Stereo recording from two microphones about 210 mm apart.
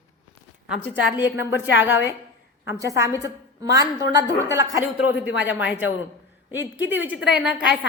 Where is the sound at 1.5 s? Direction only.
55° left (ahead or behind).